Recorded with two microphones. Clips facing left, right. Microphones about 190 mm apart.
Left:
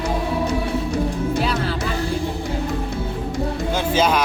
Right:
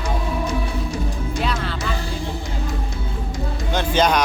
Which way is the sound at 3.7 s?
5° left (ahead or behind).